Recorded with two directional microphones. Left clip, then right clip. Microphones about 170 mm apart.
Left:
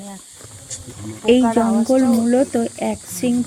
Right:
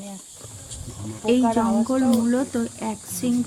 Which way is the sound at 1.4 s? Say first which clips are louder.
Left 4 dB; 35° left (ahead or behind).